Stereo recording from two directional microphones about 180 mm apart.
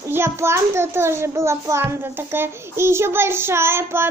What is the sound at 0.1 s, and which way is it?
A child's voice, 15° right (ahead or behind).